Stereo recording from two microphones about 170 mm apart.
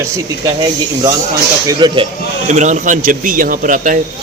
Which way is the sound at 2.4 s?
45° right (ahead or behind).